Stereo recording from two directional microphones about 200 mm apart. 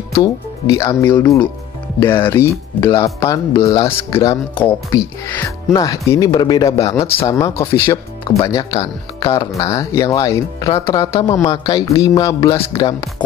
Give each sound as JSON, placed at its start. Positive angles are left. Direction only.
{"t": 0.2, "sound": "speech", "side_deg": 15}
{"t": 3.6, "sound": "speech", "side_deg": 30}
{"t": 4.1, "sound": "speech", "side_deg": 15}